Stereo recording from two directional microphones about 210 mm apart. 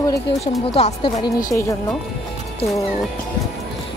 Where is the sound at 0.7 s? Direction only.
30° left (ahead or behind).